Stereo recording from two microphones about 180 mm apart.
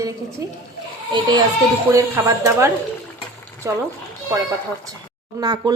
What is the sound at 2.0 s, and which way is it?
Speech, 15° right (ahead or behind).